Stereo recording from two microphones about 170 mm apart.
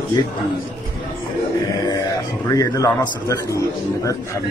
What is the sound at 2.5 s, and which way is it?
A man's voice, 20° left (ahead or behind).